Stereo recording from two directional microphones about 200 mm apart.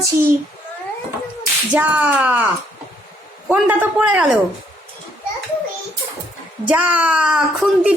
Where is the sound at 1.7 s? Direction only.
10° right (ahead or behind).